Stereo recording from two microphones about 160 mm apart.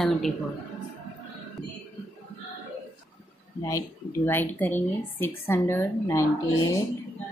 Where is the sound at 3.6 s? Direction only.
15° left (ahead or behind).